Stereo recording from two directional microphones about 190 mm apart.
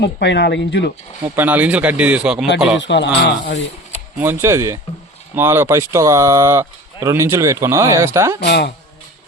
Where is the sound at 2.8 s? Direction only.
70° left (ahead or behind).